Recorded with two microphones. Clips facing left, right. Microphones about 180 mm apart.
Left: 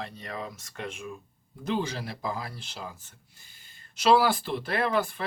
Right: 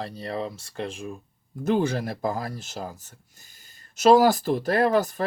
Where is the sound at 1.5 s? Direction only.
50° right (ahead or behind).